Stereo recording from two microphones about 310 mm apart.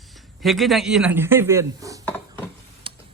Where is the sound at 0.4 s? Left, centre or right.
Centre.